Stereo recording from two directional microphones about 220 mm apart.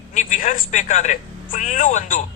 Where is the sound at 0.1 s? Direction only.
35° left (ahead or behind).